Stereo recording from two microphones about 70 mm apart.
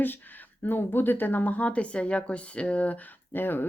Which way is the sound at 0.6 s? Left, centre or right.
Left.